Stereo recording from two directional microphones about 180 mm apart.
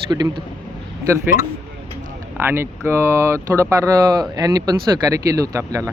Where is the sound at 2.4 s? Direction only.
15° right (ahead or behind).